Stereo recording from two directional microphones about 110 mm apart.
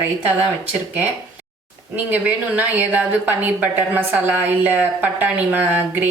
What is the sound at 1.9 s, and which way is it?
A woman's voice, 15° right (ahead or behind).